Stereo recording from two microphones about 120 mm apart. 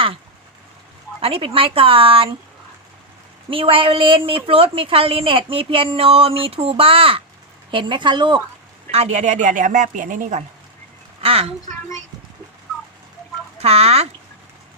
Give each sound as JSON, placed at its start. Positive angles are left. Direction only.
{"t": 1.2, "sound": "a woman's voice", "side_deg": -50}
{"t": 3.5, "sound": "a woman's voice", "side_deg": -50}
{"t": 8.9, "sound": "speech", "side_deg": -70}
{"t": 11.2, "sound": "a sound", "side_deg": -55}
{"t": 13.6, "sound": "speech", "side_deg": -60}